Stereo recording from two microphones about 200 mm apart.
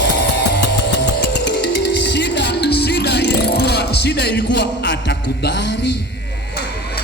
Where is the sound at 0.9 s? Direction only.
60° left (ahead or behind).